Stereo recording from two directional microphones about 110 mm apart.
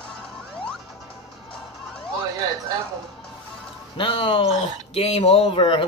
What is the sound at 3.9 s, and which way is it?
Speech, 50° left (ahead or behind).